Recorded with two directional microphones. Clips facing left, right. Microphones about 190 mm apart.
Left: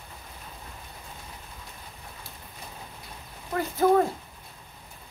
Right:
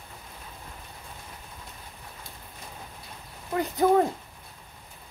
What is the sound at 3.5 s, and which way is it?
Owl, 15° right (ahead or behind).